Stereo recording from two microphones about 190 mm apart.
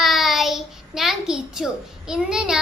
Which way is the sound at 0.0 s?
Centre (ahead or behind).